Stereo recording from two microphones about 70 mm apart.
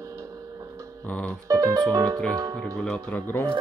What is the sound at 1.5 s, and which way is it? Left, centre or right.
Music, right.